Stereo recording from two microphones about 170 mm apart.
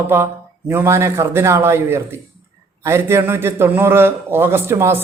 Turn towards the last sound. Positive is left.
turn(degrees=-15)  # may be behind; listen again after turning